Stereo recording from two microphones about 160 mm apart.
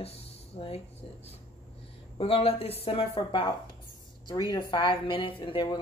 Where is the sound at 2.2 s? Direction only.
35° left (ahead or behind).